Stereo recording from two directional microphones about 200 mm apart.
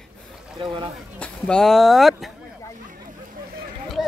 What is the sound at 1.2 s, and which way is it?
Speech, 5° left (ahead or behind).